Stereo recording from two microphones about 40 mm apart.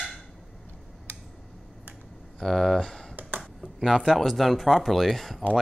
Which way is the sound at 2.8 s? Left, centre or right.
Centre.